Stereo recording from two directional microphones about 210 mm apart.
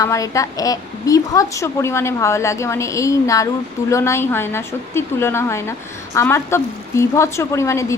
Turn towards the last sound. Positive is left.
turn(degrees=15)  # may be behind; listen again after turning